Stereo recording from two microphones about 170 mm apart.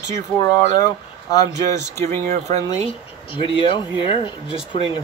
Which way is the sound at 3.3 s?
30° left (ahead or behind).